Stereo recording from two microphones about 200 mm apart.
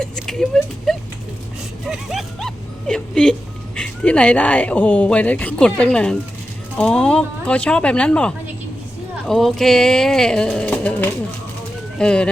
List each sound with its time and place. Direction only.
0.0 s speech: 5° left (ahead or behind)
1.9 s dog: centre (ahead or behind)
3.8 s speech: 5° left (ahead or behind)